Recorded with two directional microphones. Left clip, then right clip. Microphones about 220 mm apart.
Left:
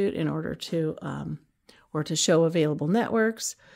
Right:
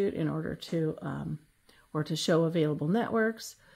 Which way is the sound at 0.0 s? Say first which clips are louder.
Left 4 dB; 35° left (ahead or behind).